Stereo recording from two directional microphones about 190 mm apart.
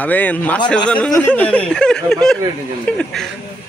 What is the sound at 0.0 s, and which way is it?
A man's voice, 10° left (ahead or behind).